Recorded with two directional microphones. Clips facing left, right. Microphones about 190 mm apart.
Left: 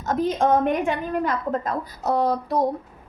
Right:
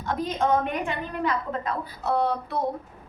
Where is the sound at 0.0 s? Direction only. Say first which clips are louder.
Left 5 dB; 45° left (ahead or behind).